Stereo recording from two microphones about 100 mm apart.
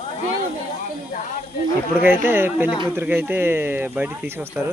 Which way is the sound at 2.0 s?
20° right (ahead or behind).